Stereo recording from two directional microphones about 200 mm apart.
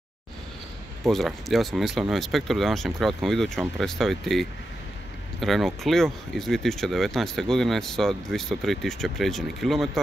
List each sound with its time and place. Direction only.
1.0 s speech: centre (ahead or behind)